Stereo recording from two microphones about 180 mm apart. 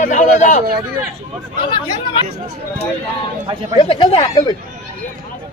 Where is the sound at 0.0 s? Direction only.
45° left (ahead or behind).